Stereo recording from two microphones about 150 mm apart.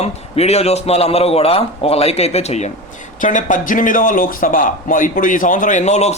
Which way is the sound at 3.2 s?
60° left (ahead or behind).